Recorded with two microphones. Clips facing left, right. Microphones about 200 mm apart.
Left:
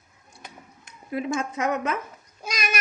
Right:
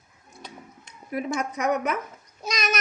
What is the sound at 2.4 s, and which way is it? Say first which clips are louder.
Cat: right 2 dB; 10° left (ahead or behind).